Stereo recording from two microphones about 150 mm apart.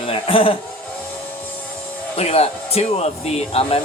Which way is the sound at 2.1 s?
40° left (ahead or behind).